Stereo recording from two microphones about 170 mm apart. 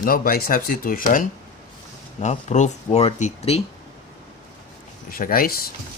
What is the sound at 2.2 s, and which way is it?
Speech, 40° left (ahead or behind).